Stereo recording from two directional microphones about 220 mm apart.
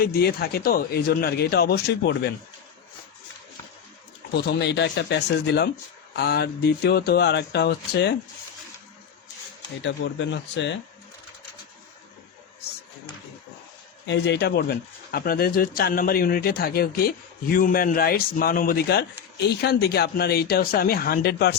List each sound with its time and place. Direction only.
0.0 s speech: 45° left (ahead or behind)
4.4 s speech: 50° left (ahead or behind)
9.8 s speech: 55° left (ahead or behind)
14.1 s a man's voice: 50° left (ahead or behind)